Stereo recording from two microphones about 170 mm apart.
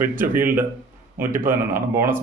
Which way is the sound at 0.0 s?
10° right (ahead or behind).